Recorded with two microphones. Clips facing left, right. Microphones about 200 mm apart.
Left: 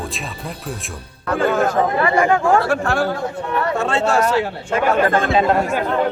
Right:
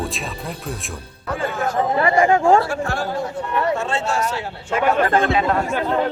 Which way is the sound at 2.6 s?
85° left.